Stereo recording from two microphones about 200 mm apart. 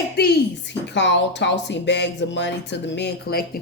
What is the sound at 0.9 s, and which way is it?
A woman's voice, 60° left (ahead or behind).